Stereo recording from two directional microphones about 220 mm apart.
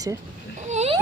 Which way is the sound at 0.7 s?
30° right (ahead or behind).